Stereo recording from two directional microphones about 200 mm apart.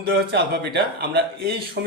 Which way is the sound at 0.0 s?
55° right (ahead or behind).